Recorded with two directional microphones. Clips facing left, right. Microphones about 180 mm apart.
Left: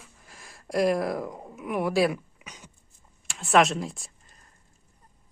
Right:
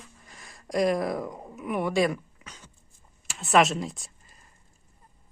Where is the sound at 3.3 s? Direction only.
Centre (ahead or behind).